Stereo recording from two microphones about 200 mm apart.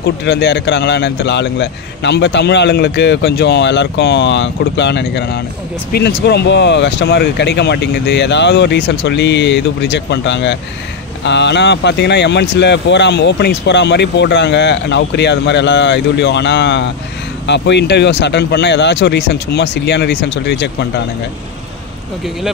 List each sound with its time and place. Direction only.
0.0 s speech: 60° left (ahead or behind)